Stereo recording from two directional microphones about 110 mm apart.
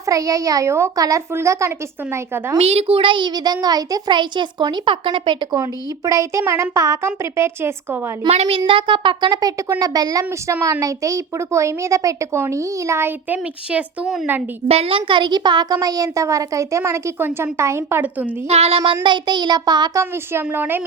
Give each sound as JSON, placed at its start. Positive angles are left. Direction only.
{"t": 0.0, "sound": "a child's voice", "side_deg": -30}
{"t": 2.6, "sound": "a child's voice", "side_deg": -70}
{"t": 6.1, "sound": "child singing", "side_deg": -30}
{"t": 6.4, "sound": "a child's voice", "side_deg": -25}
{"t": 8.3, "sound": "a child's voice", "side_deg": -70}
{"t": 14.7, "sound": "a child's voice", "side_deg": -60}
{"t": 18.4, "sound": "speech", "side_deg": -70}
{"t": 19.0, "sound": "child singing", "side_deg": -45}
{"t": 20.0, "sound": "a child's voice", "side_deg": -20}